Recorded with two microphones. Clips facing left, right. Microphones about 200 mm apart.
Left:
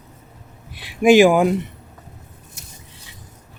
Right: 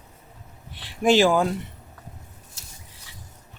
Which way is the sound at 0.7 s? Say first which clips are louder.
Left 7 dB; 10° left (ahead or behind).